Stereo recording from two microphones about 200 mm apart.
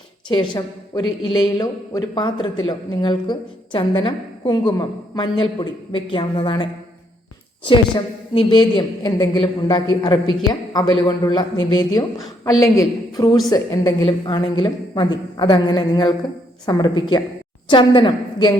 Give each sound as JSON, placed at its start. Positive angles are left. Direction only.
{"t": 0.3, "sound": "a woman's voice", "side_deg": 20}
{"t": 12.5, "sound": "a man's voice", "side_deg": 15}